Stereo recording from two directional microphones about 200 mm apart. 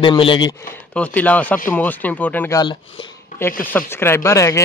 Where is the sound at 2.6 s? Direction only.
25° left (ahead or behind).